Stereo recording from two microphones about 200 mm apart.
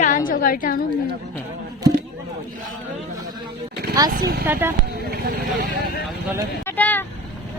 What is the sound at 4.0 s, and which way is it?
Speech, 15° right (ahead or behind).